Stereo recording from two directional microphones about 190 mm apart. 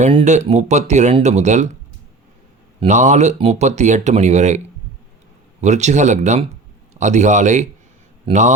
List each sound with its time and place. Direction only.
0.0 s speech: 35° right (ahead or behind)
2.8 s speech: 40° right (ahead or behind)